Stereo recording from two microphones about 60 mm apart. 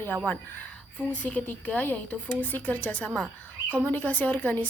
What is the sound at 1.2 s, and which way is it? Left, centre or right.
Speech, left.